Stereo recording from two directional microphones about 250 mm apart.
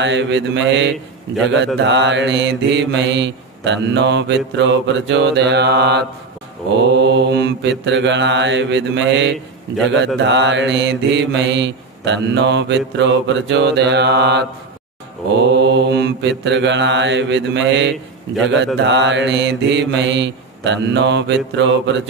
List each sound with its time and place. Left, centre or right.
0.0 s mantra: right
15.4 s mantra: right